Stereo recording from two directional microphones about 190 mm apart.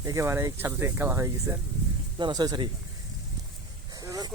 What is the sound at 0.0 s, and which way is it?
Speech, 15° right (ahead or behind).